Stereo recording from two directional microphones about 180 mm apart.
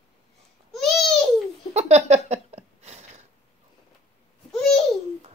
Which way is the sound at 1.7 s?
40° right (ahead or behind).